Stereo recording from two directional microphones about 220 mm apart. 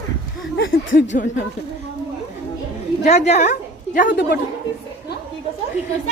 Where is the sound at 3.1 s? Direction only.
30° left (ahead or behind).